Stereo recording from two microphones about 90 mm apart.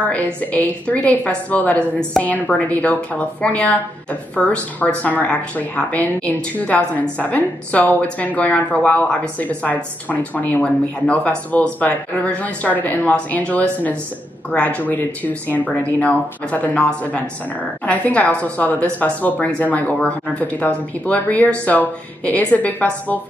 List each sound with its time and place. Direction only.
0.0 s a woman's voice: 15° left (ahead or behind)